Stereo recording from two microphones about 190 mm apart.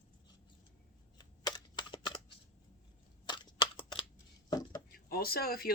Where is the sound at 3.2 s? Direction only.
25° left (ahead or behind).